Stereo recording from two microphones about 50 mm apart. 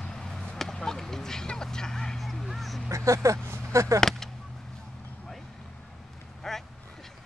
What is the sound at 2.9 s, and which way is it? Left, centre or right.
Speech, right.